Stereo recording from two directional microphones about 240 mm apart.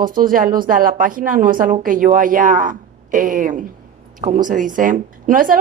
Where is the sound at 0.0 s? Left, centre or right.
Right.